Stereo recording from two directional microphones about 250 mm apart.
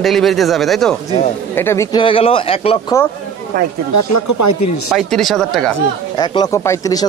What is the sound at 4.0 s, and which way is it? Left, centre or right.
Speech, left.